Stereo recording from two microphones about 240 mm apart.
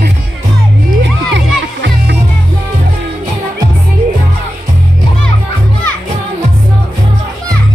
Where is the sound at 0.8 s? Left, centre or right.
Right.